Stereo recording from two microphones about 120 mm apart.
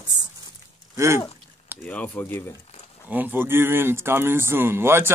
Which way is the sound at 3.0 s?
15° right (ahead or behind).